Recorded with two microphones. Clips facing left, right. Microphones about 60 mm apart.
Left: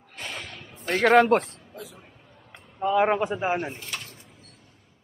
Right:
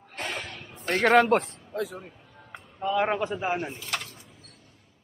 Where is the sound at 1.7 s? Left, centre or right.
Right.